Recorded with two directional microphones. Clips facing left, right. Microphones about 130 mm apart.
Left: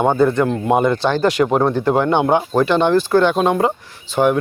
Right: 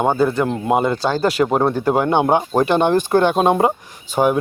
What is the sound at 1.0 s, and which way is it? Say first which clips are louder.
Speech: left 1 dB; 40° right (ahead or behind).